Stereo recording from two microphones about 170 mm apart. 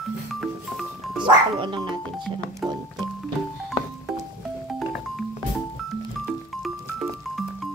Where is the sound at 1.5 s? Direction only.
30° right (ahead or behind).